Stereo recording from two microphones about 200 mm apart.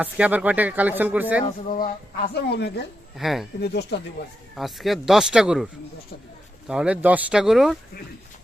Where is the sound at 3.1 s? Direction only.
Centre (ahead or behind).